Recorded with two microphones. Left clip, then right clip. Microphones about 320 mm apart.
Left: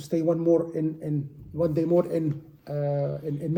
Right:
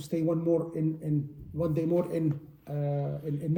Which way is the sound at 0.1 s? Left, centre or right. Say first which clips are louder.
Left 5 dB; centre.